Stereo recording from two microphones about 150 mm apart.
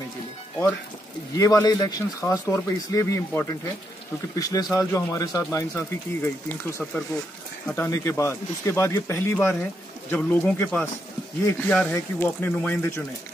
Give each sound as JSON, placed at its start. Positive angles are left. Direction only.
{"t": 1.3, "sound": "speech", "side_deg": 20}
{"t": 6.8, "sound": "speech", "side_deg": 5}
{"t": 11.9, "sound": "speech", "side_deg": 15}